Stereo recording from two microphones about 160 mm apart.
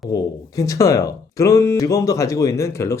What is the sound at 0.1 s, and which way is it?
Speech, 25° left (ahead or behind).